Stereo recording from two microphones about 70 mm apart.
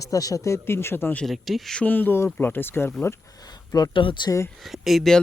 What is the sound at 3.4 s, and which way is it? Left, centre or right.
Speech, left.